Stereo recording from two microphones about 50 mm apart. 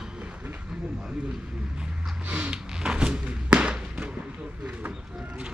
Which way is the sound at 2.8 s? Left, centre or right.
Centre.